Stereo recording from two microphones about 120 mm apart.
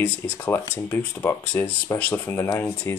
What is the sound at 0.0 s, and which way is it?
Speech, 20° left (ahead or behind).